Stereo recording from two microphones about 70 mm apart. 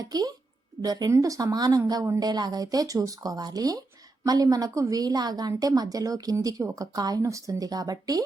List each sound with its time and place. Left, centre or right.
0.0 s speech: right
1.1 s a woman's voice: right